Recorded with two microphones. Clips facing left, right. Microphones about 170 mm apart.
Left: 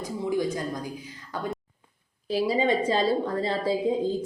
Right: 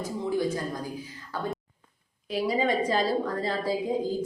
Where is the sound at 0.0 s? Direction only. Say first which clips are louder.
Left 1 dB; 15° left (ahead or behind).